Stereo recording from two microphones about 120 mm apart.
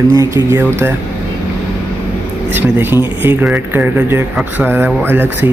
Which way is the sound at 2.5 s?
15° right (ahead or behind).